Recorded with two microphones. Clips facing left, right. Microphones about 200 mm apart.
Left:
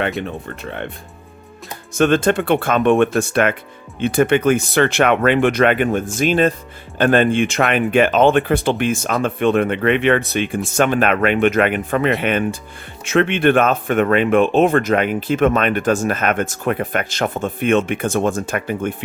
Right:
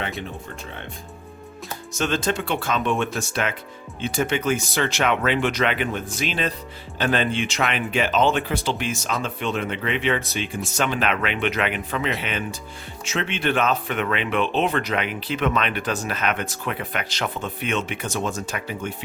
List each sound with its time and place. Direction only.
0.2 s speech: 60° left (ahead or behind)
1.9 s speech: 55° left (ahead or behind)